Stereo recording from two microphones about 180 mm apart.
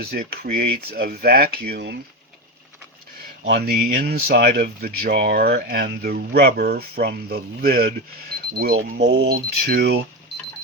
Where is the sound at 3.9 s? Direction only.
55° right (ahead or behind).